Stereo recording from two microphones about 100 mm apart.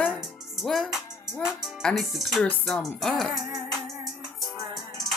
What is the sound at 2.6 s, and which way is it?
Music, 5° left (ahead or behind).